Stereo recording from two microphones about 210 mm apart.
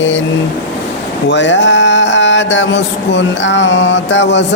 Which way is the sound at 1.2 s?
60° left (ahead or behind).